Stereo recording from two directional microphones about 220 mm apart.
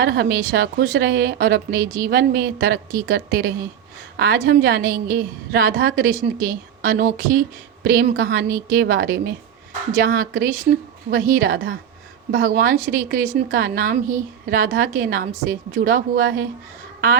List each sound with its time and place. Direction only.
0.0 s a woman's voice: 45° right (ahead or behind)